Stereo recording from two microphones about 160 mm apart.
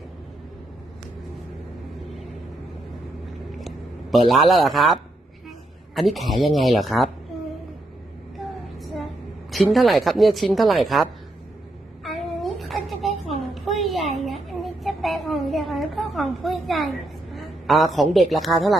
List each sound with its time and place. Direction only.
4.3 s a woman's voice: centre (ahead or behind)
9.5 s a woman's voice: centre (ahead or behind)
12.0 s a sound: centre (ahead or behind)
17.3 s a woman's voice: centre (ahead or behind)